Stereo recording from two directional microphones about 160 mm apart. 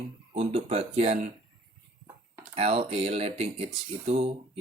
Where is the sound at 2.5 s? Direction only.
35° right (ahead or behind).